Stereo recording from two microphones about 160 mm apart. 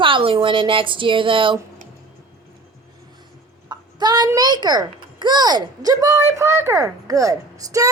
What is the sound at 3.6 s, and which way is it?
A child's voice, 25° right (ahead or behind).